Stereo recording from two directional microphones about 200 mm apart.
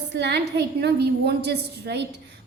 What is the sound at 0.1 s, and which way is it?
A woman's voice, 60° right (ahead or behind).